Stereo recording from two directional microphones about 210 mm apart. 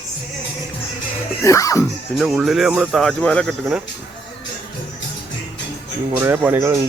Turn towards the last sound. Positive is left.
turn(degrees=-15)  # may be behind; listen again after turning